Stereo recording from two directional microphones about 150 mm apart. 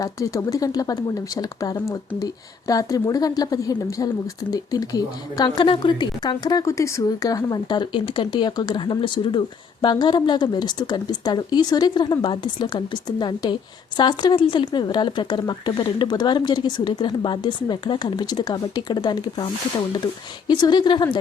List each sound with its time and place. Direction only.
0.0 s a woman's voice: 20° left (ahead or behind)
20.5 s a woman's voice: 30° left (ahead or behind)